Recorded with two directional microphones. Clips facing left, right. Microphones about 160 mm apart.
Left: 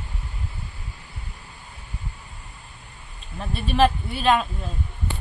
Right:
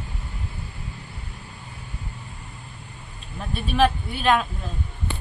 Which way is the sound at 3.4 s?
Centre (ahead or behind).